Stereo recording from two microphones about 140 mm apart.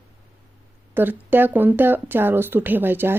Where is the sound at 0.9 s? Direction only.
15° right (ahead or behind).